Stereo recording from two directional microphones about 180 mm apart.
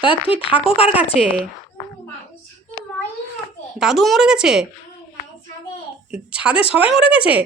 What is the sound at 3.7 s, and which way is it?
Speech, centre (ahead or behind).